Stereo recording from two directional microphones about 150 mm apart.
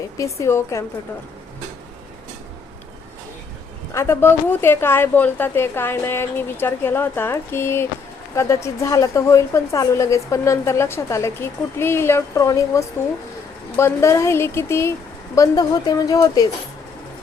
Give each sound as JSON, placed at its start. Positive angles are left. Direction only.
{"t": 0.2, "sound": "a woman's voice", "side_deg": 20}
{"t": 3.9, "sound": "a woman's voice", "side_deg": 20}